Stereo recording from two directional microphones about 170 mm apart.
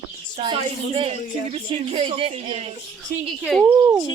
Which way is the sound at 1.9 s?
35° right (ahead or behind).